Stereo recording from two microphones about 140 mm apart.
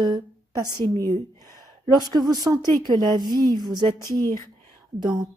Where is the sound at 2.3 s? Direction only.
25° right (ahead or behind).